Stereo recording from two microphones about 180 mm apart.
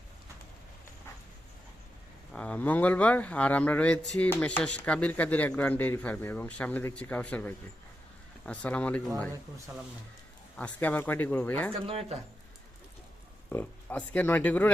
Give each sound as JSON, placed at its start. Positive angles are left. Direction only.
{"t": 2.3, "sound": "speech", "side_deg": 5}
{"t": 10.6, "sound": "speech", "side_deg": 10}
{"t": 11.7, "sound": "speech", "side_deg": -35}
{"t": 13.5, "sound": "speech", "side_deg": 10}